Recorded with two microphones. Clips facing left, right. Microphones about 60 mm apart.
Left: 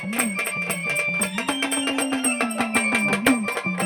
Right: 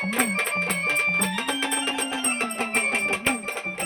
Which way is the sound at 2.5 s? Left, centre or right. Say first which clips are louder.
Left 3 dB; left.